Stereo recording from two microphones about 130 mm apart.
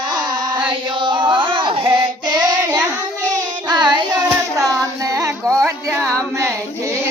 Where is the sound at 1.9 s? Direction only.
30° right (ahead or behind).